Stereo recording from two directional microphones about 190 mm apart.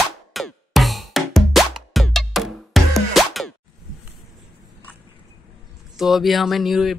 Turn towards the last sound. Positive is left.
turn(degrees=0)  # may be behind; listen again after turning